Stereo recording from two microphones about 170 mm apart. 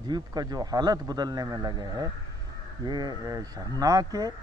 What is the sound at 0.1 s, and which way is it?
Speech, 25° right (ahead or behind).